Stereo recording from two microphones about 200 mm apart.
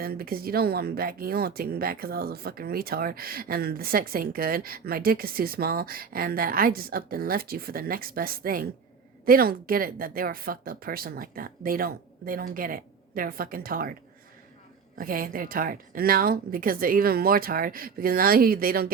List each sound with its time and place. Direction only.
0.0 s speech: 50° right (ahead or behind)
14.9 s speech: 45° right (ahead or behind)